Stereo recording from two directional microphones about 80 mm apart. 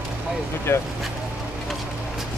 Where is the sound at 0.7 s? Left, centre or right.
Left.